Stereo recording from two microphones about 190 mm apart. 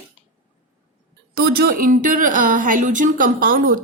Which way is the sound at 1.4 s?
55° right (ahead or behind).